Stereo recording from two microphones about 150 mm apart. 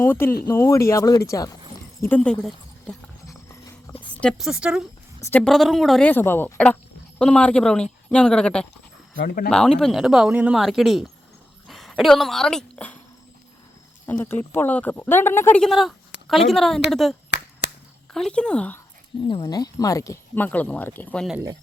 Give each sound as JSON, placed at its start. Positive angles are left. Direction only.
{"t": 0.0, "sound": "speech", "side_deg": 15}
{"t": 4.2, "sound": "speech", "side_deg": 0}
{"t": 6.1, "sound": "speech", "side_deg": 15}
{"t": 9.1, "sound": "speech", "side_deg": 85}
{"t": 9.5, "sound": "speech", "side_deg": 5}
{"t": 14.1, "sound": "speech", "side_deg": 10}
{"t": 15.6, "sound": "speech", "side_deg": 0}
{"t": 19.4, "sound": "speech", "side_deg": 25}